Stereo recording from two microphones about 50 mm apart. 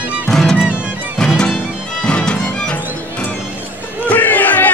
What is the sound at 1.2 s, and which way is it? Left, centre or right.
Music, centre.